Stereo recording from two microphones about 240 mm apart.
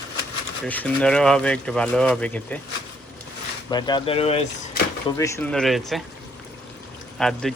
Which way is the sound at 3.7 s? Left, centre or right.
Centre.